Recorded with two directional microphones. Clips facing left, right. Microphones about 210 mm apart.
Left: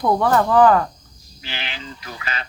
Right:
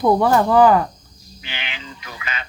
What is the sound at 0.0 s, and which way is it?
Speech, 10° right (ahead or behind).